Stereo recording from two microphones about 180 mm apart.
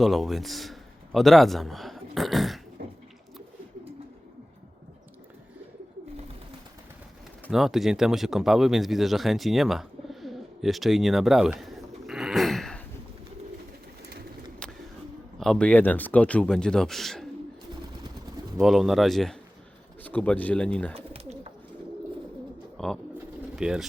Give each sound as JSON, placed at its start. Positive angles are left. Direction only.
{"t": 0.0, "sound": "a man's voice", "side_deg": 0}
{"t": 7.5, "sound": "speech", "side_deg": 0}
{"t": 14.6, "sound": "a sound", "side_deg": 5}
{"t": 15.4, "sound": "speech", "side_deg": 5}
{"t": 18.5, "sound": "speech", "side_deg": 0}
{"t": 20.9, "sound": "bird", "side_deg": -35}
{"t": 22.8, "sound": "speech", "side_deg": 5}